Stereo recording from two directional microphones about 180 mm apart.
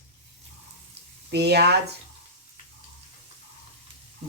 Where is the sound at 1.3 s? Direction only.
65° right (ahead or behind).